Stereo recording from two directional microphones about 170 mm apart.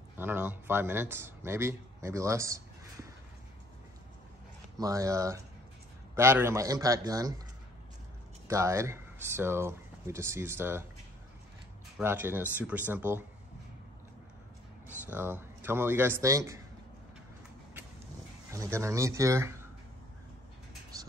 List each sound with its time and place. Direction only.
0.2 s speech: 10° right (ahead or behind)
4.7 s a man's voice: 20° right (ahead or behind)
8.5 s speech: 15° right (ahead or behind)
12.0 s speech: 15° right (ahead or behind)
15.1 s speech: 15° right (ahead or behind)
18.5 s speech: 15° right (ahead or behind)
20.9 s whispering: 20° right (ahead or behind)